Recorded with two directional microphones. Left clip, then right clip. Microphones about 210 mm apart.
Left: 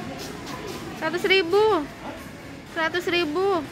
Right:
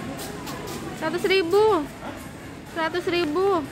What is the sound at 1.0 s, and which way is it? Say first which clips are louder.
Speech: left 1 dB; centre (ahead or behind).